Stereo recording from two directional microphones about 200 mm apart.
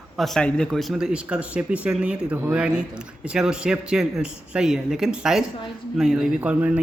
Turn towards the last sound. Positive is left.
turn(degrees=-5)  # may be behind; listen again after turning